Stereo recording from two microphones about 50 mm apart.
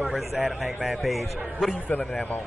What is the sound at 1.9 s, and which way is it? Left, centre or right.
Speech, left.